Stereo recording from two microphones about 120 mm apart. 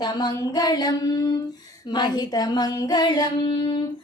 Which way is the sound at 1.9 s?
35° left (ahead or behind).